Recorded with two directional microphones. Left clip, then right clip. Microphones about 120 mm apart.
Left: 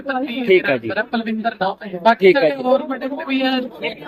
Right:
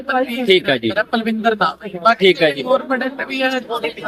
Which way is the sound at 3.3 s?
40° right (ahead or behind).